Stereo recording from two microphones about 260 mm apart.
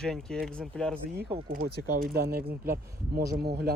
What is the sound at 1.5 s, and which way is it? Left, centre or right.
Speech, right.